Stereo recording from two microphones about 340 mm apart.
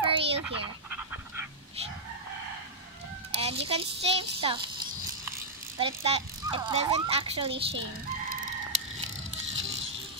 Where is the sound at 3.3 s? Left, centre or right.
Centre.